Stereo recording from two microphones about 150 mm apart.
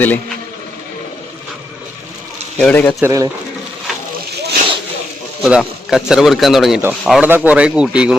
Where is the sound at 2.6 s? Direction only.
10° left (ahead or behind).